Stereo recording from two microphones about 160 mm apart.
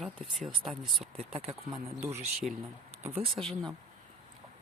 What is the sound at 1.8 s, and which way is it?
Speech, 15° right (ahead or behind).